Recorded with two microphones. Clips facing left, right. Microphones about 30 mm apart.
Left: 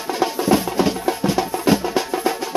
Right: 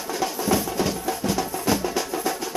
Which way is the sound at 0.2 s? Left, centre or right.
Left.